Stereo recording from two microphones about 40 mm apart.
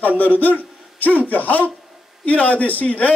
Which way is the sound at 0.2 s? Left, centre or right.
Left.